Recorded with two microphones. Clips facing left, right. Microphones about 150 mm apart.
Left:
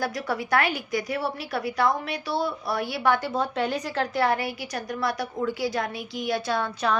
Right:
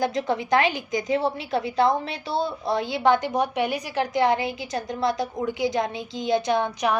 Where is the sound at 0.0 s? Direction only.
20° right (ahead or behind).